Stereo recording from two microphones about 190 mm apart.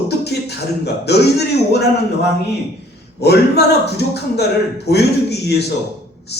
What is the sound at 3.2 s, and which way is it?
A man's voice, 60° left (ahead or behind).